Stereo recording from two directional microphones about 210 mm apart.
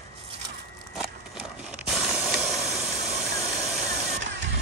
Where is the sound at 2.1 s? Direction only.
5° right (ahead or behind).